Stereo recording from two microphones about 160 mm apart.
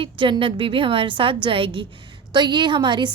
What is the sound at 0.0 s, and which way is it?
A woman's voice, 30° right (ahead or behind).